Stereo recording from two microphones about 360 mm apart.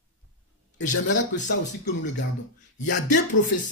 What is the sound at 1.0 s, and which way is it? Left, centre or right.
Speech, left.